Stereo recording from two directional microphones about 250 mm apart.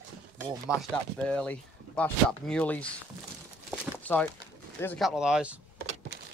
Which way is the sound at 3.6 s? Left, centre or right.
Centre.